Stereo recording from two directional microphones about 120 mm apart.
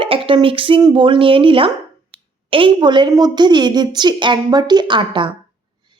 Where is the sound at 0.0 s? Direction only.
45° right (ahead or behind).